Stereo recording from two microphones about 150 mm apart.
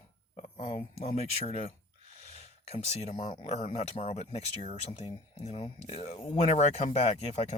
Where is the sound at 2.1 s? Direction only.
50° left (ahead or behind).